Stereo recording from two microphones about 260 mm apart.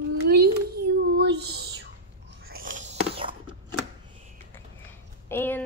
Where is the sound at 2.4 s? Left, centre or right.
Right.